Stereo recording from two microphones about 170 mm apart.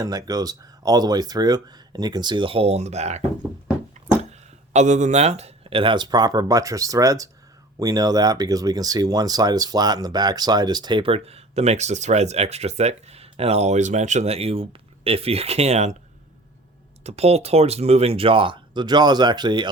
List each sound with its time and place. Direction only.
0.0 s speech: 20° right (ahead or behind); by 16.0 s 40° right (ahead or behind)
17.0 s speech: 40° right (ahead or behind)